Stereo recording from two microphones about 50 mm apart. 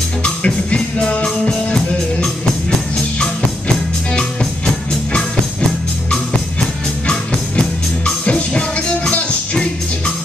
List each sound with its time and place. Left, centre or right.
0.2 s music: centre
3.2 s music: centre
7.1 s music: centre